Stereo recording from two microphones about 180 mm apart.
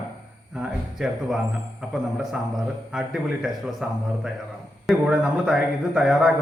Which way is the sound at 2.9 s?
Centre (ahead or behind).